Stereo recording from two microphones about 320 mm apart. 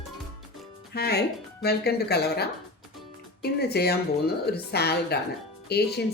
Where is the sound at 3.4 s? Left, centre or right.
Left.